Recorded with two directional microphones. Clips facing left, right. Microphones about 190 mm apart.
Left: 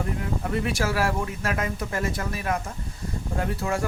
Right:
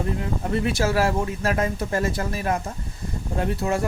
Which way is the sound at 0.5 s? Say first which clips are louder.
Right 4 dB; 25° right (ahead or behind).